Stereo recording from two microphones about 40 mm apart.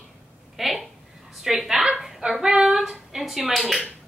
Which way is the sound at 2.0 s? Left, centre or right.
Centre.